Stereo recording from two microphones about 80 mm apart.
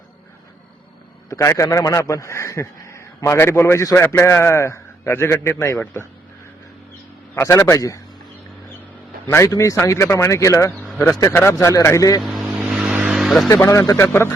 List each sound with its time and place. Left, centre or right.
1.3 s a man's voice: left
7.3 s a man's voice: left
9.3 s a man's voice: left
12.4 s vehicle: centre
13.1 s vehicle: centre
13.5 s a man's voice: left